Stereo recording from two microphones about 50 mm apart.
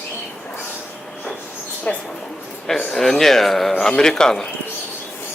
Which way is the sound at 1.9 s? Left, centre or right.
Left.